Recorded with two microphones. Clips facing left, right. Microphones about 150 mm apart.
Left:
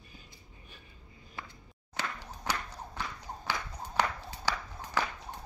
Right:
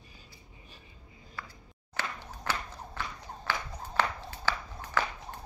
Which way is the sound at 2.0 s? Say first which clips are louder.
Even; 15° left (ahead or behind).